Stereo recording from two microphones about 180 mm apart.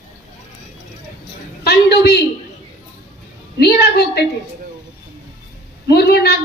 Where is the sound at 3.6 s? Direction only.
65° left (ahead or behind).